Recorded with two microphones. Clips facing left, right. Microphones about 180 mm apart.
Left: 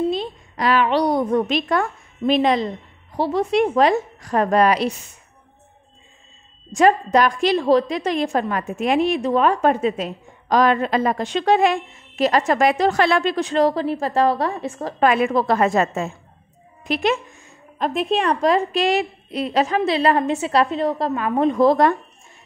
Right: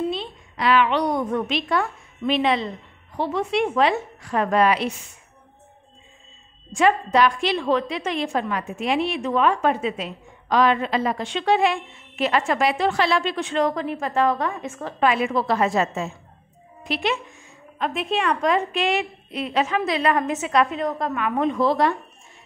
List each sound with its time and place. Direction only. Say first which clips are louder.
0.1 s a woman's voice: left 5 dB; 40° left (ahead or behind)
6.7 s a woman's voice: left 3 dB; 40° left (ahead or behind)